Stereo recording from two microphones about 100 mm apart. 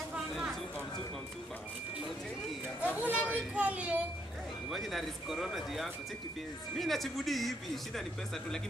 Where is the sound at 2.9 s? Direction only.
15° right (ahead or behind).